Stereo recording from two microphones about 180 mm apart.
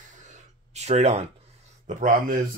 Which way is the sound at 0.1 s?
40° right (ahead or behind).